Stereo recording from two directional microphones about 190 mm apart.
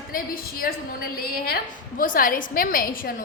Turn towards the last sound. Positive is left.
turn(degrees=50)  # may be behind; listen again after turning